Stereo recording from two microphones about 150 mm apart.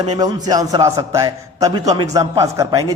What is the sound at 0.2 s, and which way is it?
A man's voice, 25° right (ahead or behind).